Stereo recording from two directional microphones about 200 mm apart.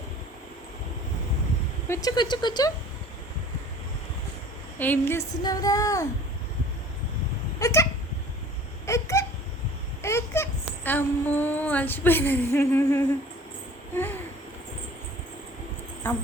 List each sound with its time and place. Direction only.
1.9 s speech: 20° left (ahead or behind)
4.8 s a woman's voice: 10° left (ahead or behind)
7.6 s a woman's voice: 15° left (ahead or behind)
8.9 s a sound: 15° left (ahead or behind)
10.0 s speech: 15° left (ahead or behind)
13.9 s a sound: 10° left (ahead or behind)
16.0 s a woman's voice: 10° left (ahead or behind)